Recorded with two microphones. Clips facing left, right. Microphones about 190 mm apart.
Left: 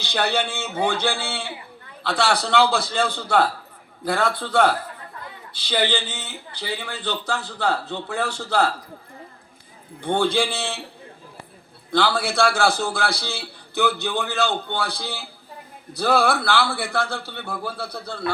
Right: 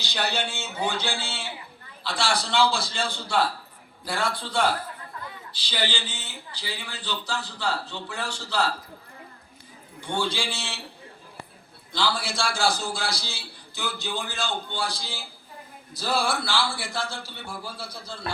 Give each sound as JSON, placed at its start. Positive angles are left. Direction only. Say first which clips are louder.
{"t": 0.0, "sound": "a man's voice", "louder": "left 5 dB", "side_deg": 55}
{"t": 10.0, "sound": "a man's voice", "louder": "left 8 dB", "side_deg": 55}
{"t": 11.9, "sound": "a man's voice", "louder": "left 6 dB", "side_deg": 60}